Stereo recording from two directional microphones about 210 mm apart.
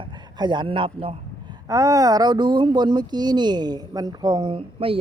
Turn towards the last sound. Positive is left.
turn(degrees=-25)  # may be behind; listen again after turning